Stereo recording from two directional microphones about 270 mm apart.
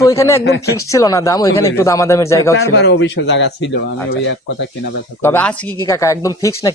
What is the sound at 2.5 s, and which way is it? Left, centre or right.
Speech, left.